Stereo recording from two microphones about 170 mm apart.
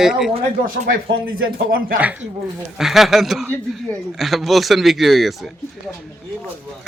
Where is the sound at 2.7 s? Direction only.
Centre (ahead or behind).